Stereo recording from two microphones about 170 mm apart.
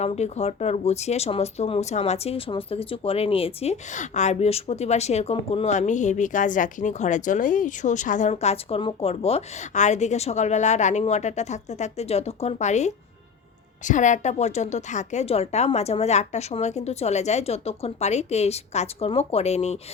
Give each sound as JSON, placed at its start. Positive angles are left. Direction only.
{"t": 0.0, "sound": "speech", "side_deg": 40}